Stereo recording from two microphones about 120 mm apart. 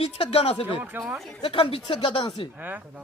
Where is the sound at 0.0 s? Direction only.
50° left (ahead or behind).